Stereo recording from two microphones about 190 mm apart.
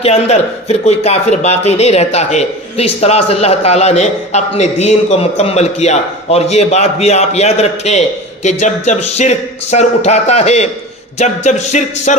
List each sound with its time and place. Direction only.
0.0 s speech: 35° left (ahead or behind)